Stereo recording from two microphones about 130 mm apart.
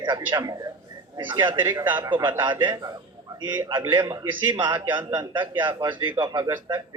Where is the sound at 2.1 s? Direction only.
35° right (ahead or behind).